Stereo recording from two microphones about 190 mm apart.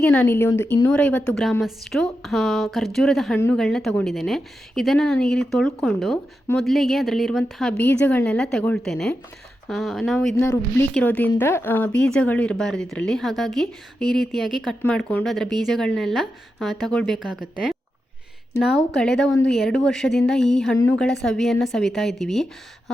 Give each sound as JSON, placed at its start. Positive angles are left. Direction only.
{"t": 0.0, "sound": "a woman's voice", "side_deg": 10}
{"t": 10.3, "sound": "a woman's voice", "side_deg": 15}
{"t": 18.9, "sound": "a woman's voice", "side_deg": 5}